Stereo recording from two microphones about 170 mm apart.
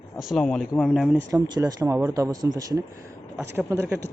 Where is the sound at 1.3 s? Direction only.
20° right (ahead or behind).